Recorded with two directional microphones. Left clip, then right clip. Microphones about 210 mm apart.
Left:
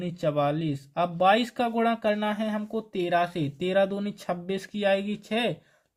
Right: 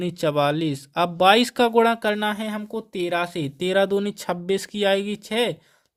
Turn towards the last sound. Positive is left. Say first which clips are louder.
# right 5 dB
turn(degrees=-35)  # may be behind; listen again after turning